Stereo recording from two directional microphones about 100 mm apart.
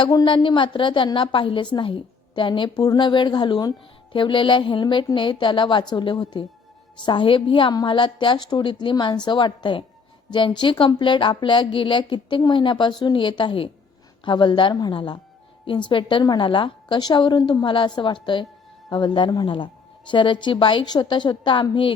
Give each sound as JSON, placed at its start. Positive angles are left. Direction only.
{"t": 0.0, "sound": "speech", "side_deg": 45}